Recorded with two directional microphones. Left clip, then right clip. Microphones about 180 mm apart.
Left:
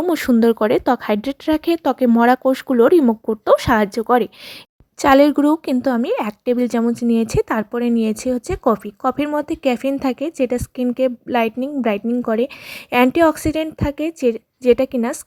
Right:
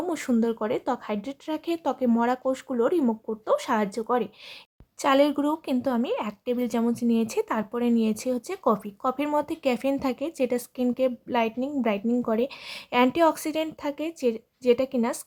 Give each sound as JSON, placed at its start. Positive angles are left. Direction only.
{"t": 0.0, "sound": "a woman's voice", "side_deg": 35}